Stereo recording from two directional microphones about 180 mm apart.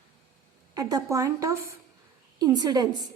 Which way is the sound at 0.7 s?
20° right (ahead or behind).